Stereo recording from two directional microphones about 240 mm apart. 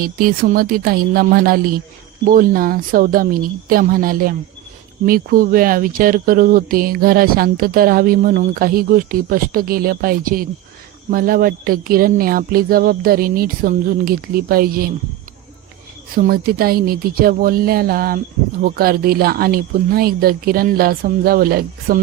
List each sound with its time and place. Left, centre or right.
0.0 s speech: right
16.1 s speech: right